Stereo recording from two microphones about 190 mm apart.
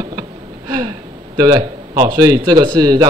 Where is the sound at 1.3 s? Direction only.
20° right (ahead or behind).